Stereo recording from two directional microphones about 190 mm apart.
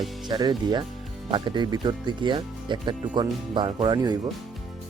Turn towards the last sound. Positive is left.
turn(degrees=-20)  # may be behind; listen again after turning